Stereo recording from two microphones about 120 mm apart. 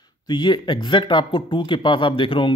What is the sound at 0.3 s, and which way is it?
Speech, 40° left (ahead or behind).